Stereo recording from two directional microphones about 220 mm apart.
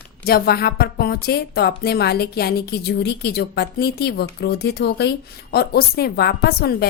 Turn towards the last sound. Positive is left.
turn(degrees=45)  # may be behind; listen again after turning